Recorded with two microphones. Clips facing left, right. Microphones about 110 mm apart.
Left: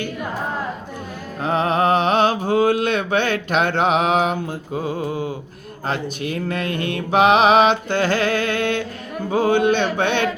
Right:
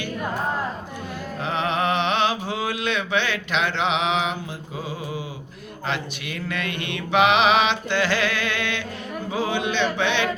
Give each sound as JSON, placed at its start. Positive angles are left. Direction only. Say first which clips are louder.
{"t": 1.4, "sound": "mantra", "louder": "left 6 dB", "side_deg": 40}
{"t": 9.3, "sound": "speech", "louder": "left 8 dB", "side_deg": 50}